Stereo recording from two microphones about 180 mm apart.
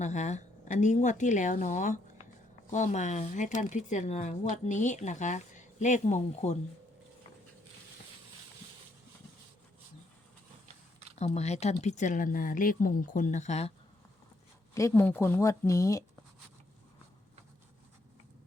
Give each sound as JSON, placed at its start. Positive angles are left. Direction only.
{"t": 0.0, "sound": "speech", "side_deg": 40}
{"t": 11.2, "sound": "speech", "side_deg": 40}
{"t": 14.8, "sound": "speech", "side_deg": 15}